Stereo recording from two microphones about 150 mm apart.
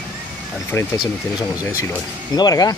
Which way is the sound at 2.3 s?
25° left (ahead or behind).